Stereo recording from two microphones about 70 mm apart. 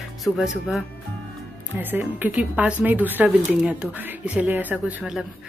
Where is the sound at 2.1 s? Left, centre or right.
Right.